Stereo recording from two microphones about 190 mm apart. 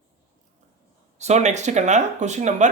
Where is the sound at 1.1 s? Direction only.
35° right (ahead or behind).